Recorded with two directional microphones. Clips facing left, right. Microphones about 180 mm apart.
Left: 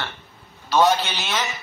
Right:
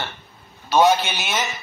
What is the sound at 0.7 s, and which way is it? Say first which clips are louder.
Speech: right 2 dB; 15° right (ahead or behind).